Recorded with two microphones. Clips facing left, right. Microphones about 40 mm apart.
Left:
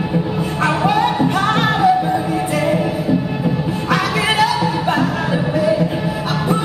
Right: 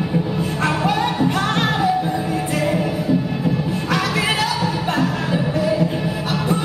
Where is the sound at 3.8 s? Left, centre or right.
Centre.